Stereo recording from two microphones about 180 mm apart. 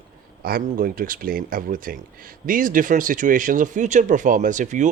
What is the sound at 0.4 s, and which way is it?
Speech, 55° right (ahead or behind).